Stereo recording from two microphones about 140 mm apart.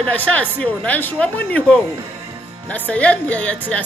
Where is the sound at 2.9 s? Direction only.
10° left (ahead or behind).